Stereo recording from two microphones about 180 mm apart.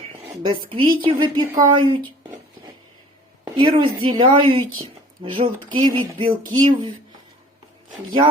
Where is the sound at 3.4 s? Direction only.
25° right (ahead or behind).